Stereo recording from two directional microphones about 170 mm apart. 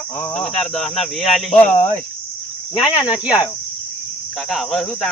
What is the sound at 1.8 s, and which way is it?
Cricket, 45° left (ahead or behind).